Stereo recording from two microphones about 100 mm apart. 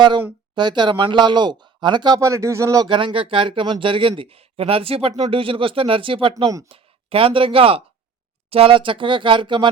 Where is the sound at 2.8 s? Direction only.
50° right (ahead or behind).